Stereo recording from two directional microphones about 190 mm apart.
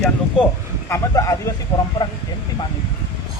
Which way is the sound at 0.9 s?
15° left (ahead or behind).